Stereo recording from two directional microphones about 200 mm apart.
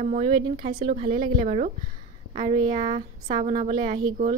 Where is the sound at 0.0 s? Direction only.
35° right (ahead or behind).